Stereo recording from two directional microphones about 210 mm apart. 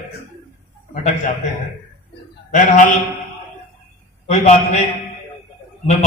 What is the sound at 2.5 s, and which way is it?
Chant, 40° left (ahead or behind).